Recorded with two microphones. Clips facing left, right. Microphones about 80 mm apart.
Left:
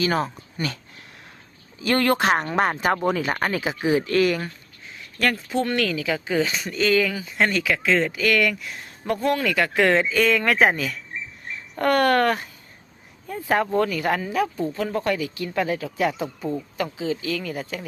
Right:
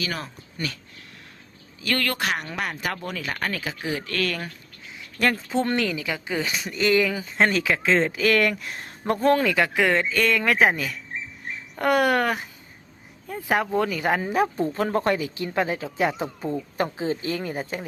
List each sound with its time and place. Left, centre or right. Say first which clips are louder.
0.0 s speech: left 8 dB; left
0.6 s speech: left 3 dB; centre
1.8 s speech: left 6 dB; left
5.2 s speech: even; right
6.0 s speech: left 5 dB; centre
7.2 s speech: right 1 dB; right
9.5 s speech: even; centre
9.7 s speech: left 3 dB; centre
11.8 s speech: left 2 dB; centre
14.3 s speech: right 1 dB; right
16.7 s speech: right 1 dB; right